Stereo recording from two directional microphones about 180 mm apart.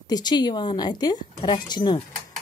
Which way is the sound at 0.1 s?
25° left (ahead or behind).